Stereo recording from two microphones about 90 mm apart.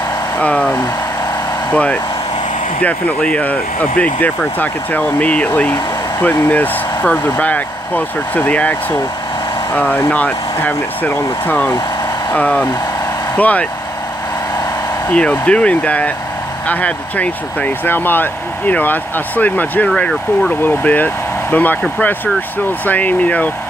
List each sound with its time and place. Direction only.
0.4 s speech: 15° left (ahead or behind)
3.2 s speech: 10° left (ahead or behind)
9.8 s speech: 20° left (ahead or behind)
15.0 s speech: 15° left (ahead or behind)
22.8 s speech: 15° left (ahead or behind)